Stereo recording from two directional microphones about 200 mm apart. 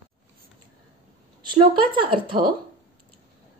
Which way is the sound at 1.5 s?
25° right (ahead or behind).